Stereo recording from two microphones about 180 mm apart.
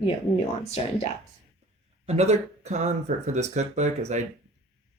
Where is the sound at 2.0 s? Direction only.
35° right (ahead or behind).